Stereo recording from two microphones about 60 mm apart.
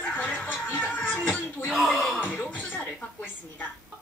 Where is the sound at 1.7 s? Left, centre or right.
Centre.